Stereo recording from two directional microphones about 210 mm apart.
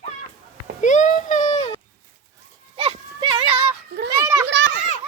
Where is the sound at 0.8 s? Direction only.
35° left (ahead or behind).